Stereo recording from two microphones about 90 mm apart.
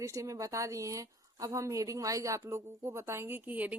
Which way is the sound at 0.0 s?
35° right (ahead or behind).